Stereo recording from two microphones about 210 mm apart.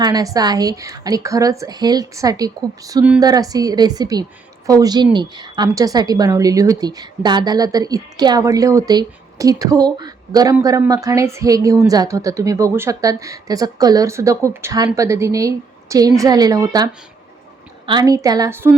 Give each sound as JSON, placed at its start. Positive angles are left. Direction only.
{"t": 0.0, "sound": "a woman's voice", "side_deg": -20}